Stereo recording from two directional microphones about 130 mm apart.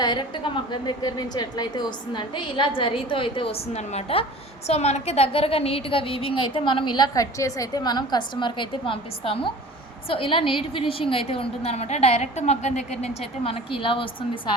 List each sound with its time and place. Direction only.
0.0 s a woman's voice: 35° left (ahead or behind)